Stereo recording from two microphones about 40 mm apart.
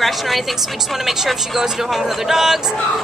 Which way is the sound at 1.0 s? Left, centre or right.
Centre.